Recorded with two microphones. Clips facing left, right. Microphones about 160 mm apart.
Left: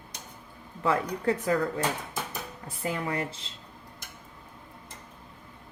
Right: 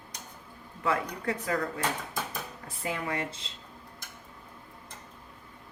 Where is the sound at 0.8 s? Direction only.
30° left (ahead or behind).